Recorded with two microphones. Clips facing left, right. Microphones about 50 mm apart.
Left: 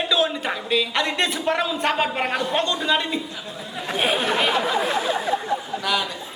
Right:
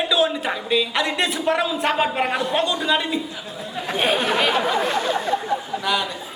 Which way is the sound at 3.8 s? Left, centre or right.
Centre.